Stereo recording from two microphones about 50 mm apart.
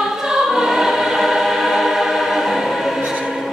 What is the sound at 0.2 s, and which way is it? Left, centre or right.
Choir, centre.